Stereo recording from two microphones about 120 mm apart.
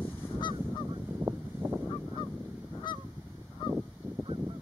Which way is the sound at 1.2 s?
15° right (ahead or behind).